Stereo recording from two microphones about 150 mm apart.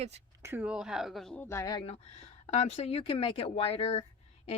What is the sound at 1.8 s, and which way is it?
Speech, 45° left (ahead or behind).